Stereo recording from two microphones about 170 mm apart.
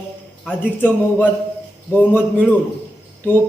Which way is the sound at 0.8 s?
10° left (ahead or behind).